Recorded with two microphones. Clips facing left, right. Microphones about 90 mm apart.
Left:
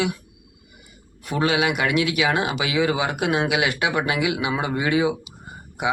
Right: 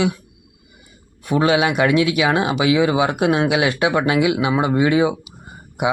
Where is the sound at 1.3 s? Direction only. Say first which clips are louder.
Right 5 dB; 25° right (ahead or behind).